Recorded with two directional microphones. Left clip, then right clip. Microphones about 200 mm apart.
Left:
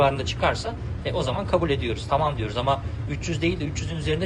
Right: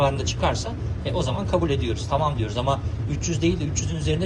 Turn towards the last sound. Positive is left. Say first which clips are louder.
# even
turn(degrees=-15)  # may be behind; listen again after turning